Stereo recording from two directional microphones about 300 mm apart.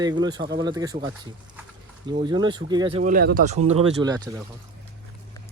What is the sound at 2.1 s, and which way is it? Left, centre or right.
Speech, centre.